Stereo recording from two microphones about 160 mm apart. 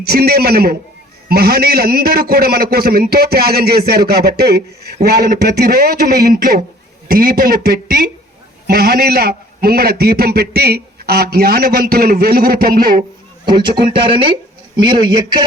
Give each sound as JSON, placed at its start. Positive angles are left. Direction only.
{"t": 0.0, "sound": "a man's voice", "side_deg": -75}
{"t": 13.4, "sound": "a man's voice", "side_deg": -30}